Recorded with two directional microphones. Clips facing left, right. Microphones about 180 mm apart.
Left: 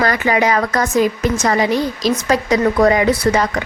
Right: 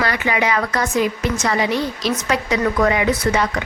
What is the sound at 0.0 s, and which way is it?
A woman's voice, 40° left (ahead or behind).